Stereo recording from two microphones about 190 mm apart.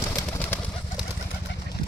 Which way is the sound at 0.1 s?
10° left (ahead or behind).